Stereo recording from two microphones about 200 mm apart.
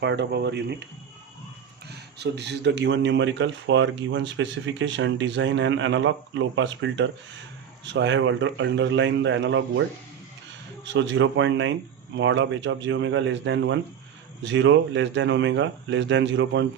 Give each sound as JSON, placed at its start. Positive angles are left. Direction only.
{"t": 0.0, "sound": "speech", "side_deg": -60}
{"t": 1.9, "sound": "speech", "side_deg": -60}
{"t": 10.8, "sound": "speech", "side_deg": -65}